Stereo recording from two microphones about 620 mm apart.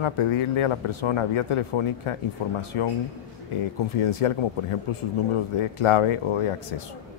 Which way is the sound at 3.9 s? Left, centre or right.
Left.